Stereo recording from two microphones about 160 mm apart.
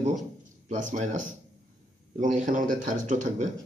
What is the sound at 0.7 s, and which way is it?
Speech, 50° right (ahead or behind).